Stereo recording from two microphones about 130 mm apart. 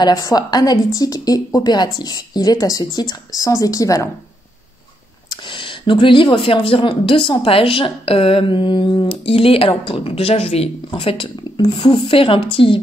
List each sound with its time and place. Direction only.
0.0 s a woman's voice: 30° left (ahead or behind)
5.3 s speech: 40° left (ahead or behind)